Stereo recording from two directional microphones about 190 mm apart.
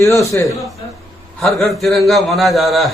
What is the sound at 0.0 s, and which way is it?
Speech, 15° left (ahead or behind).